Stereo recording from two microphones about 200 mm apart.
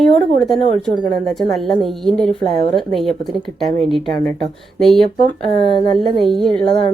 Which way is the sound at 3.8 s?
25° right (ahead or behind).